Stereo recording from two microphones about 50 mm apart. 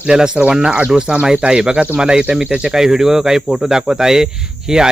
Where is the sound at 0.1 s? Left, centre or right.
Centre.